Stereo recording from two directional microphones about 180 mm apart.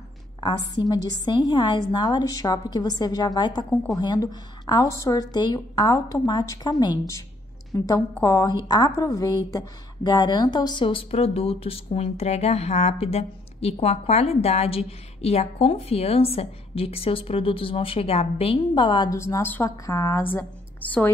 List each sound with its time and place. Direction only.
0.4 s a woman's voice: 25° left (ahead or behind)
3.7 s a woman's voice: 10° left (ahead or behind)
4.0 s a woman's voice: 25° left (ahead or behind)